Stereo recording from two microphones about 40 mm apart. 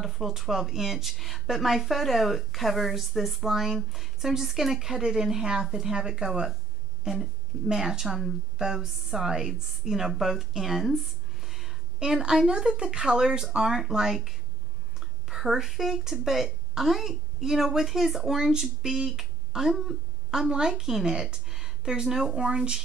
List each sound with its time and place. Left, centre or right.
0.0 s speech: centre
15.0 s a sound: centre
15.7 s speech: centre; by 22.8 s right